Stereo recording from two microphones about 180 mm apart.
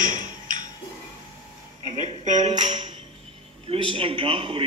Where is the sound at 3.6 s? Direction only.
30° right (ahead or behind).